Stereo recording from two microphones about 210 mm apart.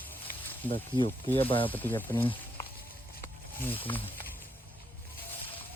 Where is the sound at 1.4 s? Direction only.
25° left (ahead or behind).